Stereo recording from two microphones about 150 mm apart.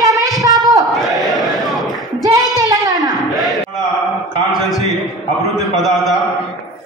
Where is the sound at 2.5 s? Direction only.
25° right (ahead or behind).